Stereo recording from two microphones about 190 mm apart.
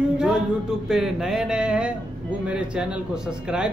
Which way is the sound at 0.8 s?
5° right (ahead or behind).